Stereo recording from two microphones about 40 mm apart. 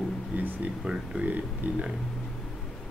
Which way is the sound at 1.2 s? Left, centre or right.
Right.